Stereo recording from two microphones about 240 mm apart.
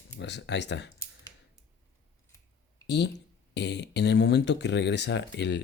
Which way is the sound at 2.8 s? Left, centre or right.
Left.